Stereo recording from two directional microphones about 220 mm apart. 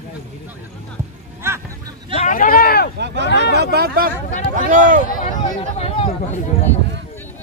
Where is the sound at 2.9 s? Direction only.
50° right (ahead or behind).